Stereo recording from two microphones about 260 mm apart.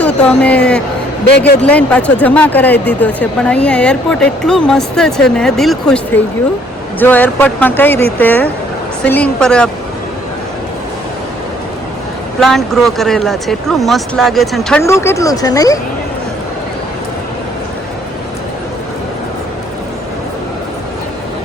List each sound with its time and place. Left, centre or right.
0.0 s speech: centre
1.3 s a man's voice: left
1.6 s speech: centre
12.4 s speech: centre